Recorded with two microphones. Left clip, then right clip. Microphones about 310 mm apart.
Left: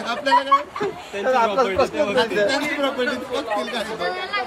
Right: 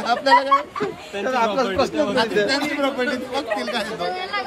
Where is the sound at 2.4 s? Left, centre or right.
Centre.